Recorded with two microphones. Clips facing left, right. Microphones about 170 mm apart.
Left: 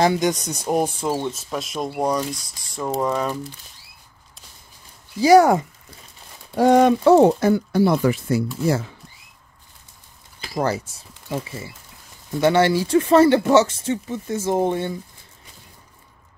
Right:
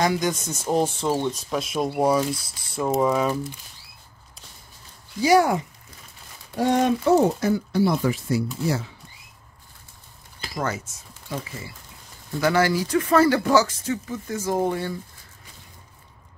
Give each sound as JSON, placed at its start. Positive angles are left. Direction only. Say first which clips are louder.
{"t": 0.0, "sound": "speech", "louder": "left 4 dB", "side_deg": 25}
{"t": 2.7, "sound": "mechanisms", "louder": "right 2 dB", "side_deg": -5}
{"t": 5.2, "sound": "speech", "louder": "left 5 dB", "side_deg": 40}
{"t": 6.5, "sound": "speech", "louder": "left 6 dB", "side_deg": 90}
{"t": 10.5, "sound": "speech", "louder": "left 5 dB", "side_deg": 35}